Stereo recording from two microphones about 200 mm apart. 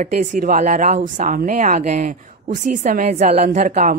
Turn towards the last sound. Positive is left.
turn(degrees=-40)  # may be behind; listen again after turning